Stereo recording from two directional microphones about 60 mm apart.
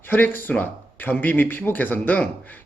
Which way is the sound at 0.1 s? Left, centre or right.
Left.